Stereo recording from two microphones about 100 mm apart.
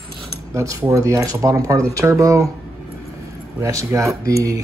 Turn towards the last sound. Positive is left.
turn(degrees=-35)  # may be behind; listen again after turning